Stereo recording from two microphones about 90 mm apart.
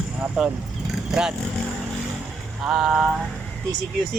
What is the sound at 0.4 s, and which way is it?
Speech, centre (ahead or behind).